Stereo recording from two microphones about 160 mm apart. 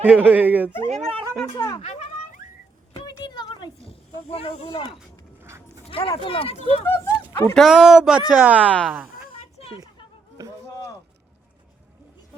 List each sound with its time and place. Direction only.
0.0 s speech: 10° right (ahead or behind)
0.9 s speech: 40° right (ahead or behind)
1.5 s speech: 25° left (ahead or behind)
2.9 s snake: 30° left (ahead or behind)
5.4 s dog: 15° right (ahead or behind)
5.9 s speech: 35° left (ahead or behind)
6.8 s speech: 15° left (ahead or behind)
7.5 s speech: centre (ahead or behind)
8.6 s speech: 5° left (ahead or behind)
9.6 s a sound: 35° left (ahead or behind)
10.4 s a sound: 20° right (ahead or behind)